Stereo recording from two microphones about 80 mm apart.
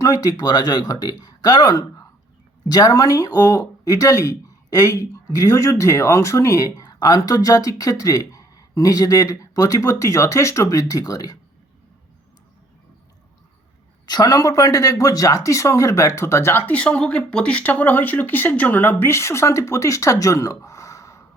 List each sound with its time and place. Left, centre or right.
0.0 s speech: left
14.1 s speech: left
16.7 s speech: centre; by 21.2 s left